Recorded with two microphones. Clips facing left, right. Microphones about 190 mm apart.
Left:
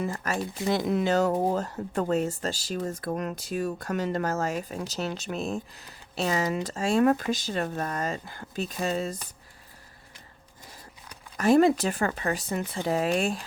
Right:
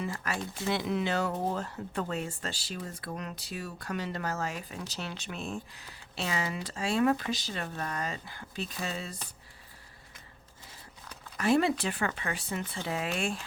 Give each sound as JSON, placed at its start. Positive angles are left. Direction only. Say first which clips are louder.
{"t": 0.0, "sound": "speech", "louder": "left 5 dB", "side_deg": 45}
{"t": 11.3, "sound": "speech", "louder": "left 6 dB", "side_deg": 45}